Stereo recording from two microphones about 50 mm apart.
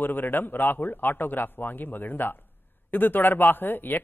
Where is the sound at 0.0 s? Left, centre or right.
Left.